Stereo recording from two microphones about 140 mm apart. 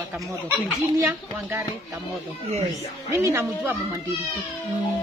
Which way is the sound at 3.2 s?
20° right (ahead or behind).